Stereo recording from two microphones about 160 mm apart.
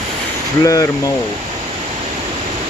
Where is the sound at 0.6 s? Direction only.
20° left (ahead or behind).